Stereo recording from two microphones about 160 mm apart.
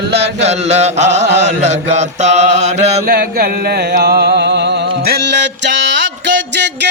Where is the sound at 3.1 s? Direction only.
70° right (ahead or behind).